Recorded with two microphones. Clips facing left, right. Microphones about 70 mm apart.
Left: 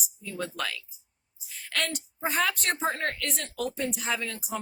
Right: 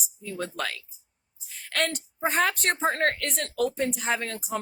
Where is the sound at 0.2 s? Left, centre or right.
Right.